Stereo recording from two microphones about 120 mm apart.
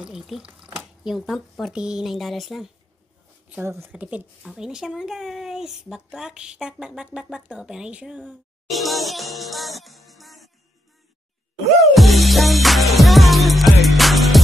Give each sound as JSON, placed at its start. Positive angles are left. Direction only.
{"t": 0.0, "sound": "speech", "side_deg": -5}
{"t": 3.6, "sound": "speech", "side_deg": -25}
{"t": 3.9, "sound": "speech", "side_deg": -10}
{"t": 8.6, "sound": "music", "side_deg": 0}
{"t": 11.9, "sound": "music", "side_deg": 0}